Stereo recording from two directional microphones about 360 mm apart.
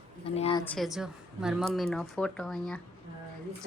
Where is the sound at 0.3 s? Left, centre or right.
Centre.